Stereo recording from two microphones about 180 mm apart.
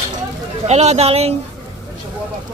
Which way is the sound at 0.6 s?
40° right (ahead or behind).